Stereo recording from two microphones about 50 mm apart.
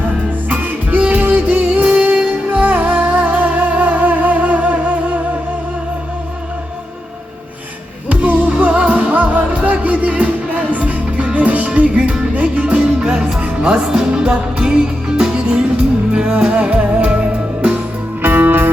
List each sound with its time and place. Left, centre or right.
0.5 s music: right
2.5 s humming: right
8.1 s music: right
13.8 s music: centre
14.1 s music: centre
18.2 s music: right